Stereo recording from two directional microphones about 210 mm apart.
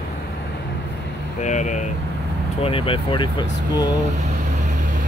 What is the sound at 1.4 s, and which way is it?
Speech, 35° left (ahead or behind).